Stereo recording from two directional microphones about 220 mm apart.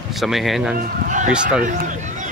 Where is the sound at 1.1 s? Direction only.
35° right (ahead or behind).